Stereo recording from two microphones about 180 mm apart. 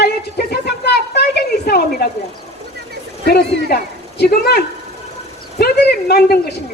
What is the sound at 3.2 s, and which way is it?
A woman's voice, 60° left (ahead or behind).